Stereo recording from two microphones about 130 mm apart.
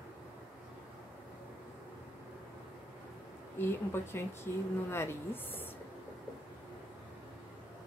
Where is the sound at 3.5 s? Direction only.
20° left (ahead or behind).